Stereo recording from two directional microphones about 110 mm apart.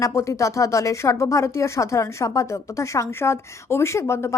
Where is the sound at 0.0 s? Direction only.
30° left (ahead or behind).